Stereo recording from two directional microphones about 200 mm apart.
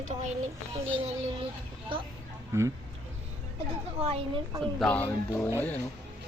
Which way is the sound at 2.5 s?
15° right (ahead or behind).